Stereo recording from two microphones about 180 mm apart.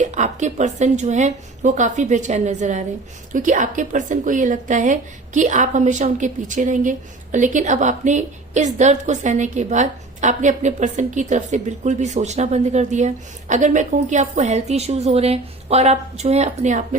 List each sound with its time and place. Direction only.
0.0 s a woman's voice: 40° right (ahead or behind)